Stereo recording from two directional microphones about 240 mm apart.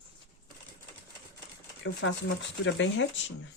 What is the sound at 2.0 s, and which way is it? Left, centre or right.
Speech, left.